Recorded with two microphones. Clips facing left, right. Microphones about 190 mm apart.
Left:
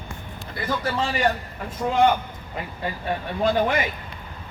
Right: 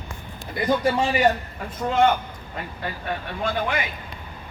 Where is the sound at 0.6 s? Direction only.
15° right (ahead or behind).